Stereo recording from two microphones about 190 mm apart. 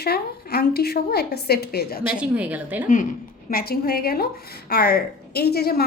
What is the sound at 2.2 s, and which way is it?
Speech, 5° right (ahead or behind).